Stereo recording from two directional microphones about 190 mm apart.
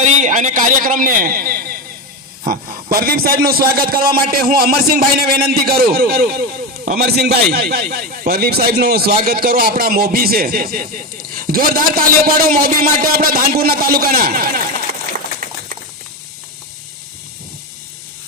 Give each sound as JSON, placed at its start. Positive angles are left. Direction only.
{"t": 0.2, "sound": "a man's voice", "side_deg": -40}